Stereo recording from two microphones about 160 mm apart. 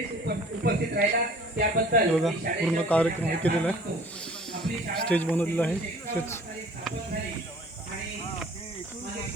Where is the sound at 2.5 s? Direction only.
60° right (ahead or behind).